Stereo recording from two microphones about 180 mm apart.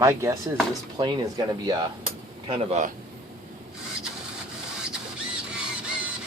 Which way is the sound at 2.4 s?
35° right (ahead or behind).